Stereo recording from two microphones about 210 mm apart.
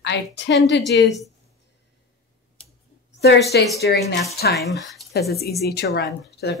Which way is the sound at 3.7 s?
50° left (ahead or behind).